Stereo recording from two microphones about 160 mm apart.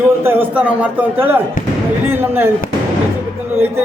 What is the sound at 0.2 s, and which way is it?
A man's voice, 15° right (ahead or behind).